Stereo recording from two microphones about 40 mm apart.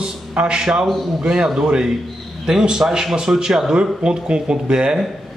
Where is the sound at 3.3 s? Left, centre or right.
Centre.